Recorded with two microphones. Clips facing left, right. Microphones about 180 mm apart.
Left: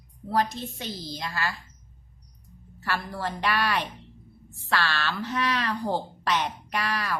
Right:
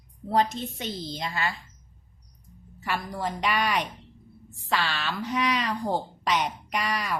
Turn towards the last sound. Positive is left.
turn(degrees=-15)  # may be behind; listen again after turning